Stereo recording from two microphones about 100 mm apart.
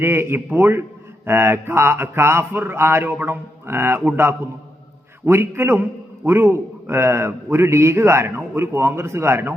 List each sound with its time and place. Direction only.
0.0 s a man's voice: 25° right (ahead or behind)